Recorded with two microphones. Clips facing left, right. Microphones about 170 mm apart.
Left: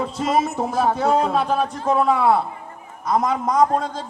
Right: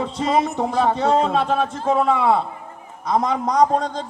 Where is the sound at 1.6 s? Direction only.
20° right (ahead or behind).